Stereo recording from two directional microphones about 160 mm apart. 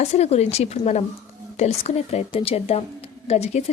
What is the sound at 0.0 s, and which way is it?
A woman's voice, 40° left (ahead or behind).